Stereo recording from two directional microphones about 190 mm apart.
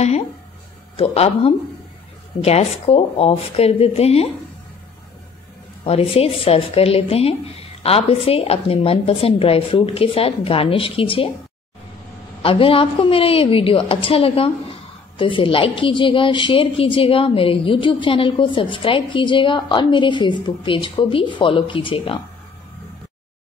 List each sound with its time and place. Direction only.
0.9 s speech: 30° left (ahead or behind)
5.9 s speech: 30° left (ahead or behind)
12.4 s a woman's voice: 30° left (ahead or behind)